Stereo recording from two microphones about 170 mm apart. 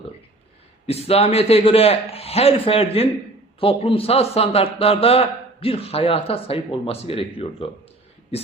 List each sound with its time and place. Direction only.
0.9 s a man's voice: 35° left (ahead or behind)